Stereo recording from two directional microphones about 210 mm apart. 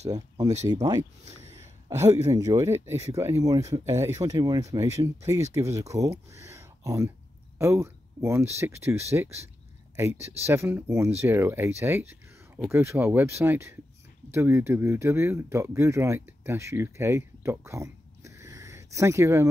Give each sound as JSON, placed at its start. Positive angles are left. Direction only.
{"t": 0.7, "sound": "speech", "side_deg": -20}
{"t": 12.5, "sound": "speech", "side_deg": 0}